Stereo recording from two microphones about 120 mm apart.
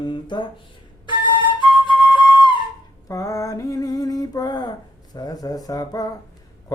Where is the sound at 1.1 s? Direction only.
40° left (ahead or behind).